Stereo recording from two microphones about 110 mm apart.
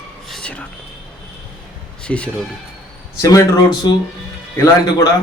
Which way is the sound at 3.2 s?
35° left (ahead or behind).